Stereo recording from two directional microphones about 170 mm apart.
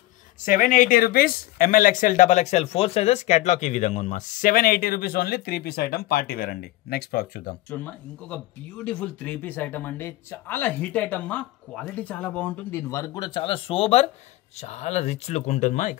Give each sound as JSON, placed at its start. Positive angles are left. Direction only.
{"t": 0.5, "sound": "speech", "side_deg": 50}
{"t": 7.7, "sound": "speech", "side_deg": 10}